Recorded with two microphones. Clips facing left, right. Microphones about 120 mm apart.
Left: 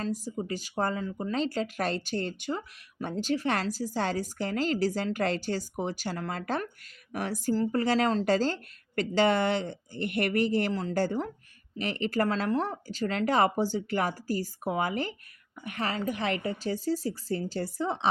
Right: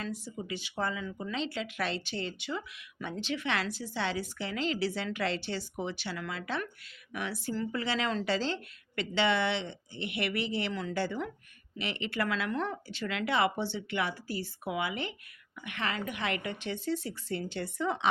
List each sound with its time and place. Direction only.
0.0 s speech: 40° left (ahead or behind)